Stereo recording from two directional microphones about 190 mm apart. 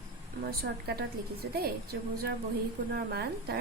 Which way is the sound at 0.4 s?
55° right (ahead or behind).